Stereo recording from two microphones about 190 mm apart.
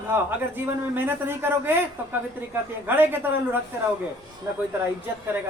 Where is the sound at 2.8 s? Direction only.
10° right (ahead or behind).